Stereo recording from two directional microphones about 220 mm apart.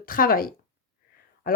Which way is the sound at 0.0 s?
40° left (ahead or behind).